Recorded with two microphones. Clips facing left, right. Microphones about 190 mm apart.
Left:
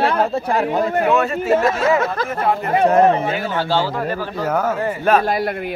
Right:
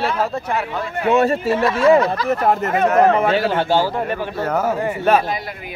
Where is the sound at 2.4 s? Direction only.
45° right (ahead or behind).